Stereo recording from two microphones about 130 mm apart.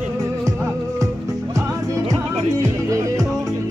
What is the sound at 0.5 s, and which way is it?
Music, 20° right (ahead or behind).